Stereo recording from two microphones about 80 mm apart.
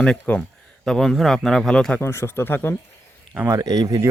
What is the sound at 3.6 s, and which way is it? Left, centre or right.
Speech, right.